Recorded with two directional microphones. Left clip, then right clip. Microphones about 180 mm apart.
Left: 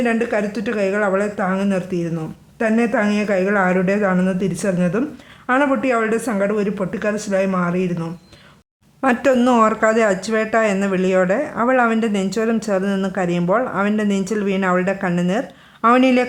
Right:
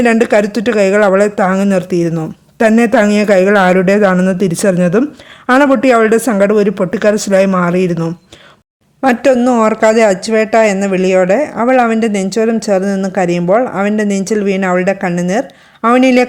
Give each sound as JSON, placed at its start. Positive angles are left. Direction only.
{"t": 0.0, "sound": "speech", "side_deg": -50}
{"t": 9.0, "sound": "speech", "side_deg": -25}